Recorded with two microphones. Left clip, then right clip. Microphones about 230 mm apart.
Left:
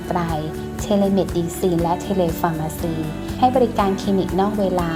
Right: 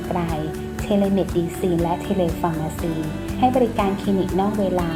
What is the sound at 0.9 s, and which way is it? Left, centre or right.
Speech, left.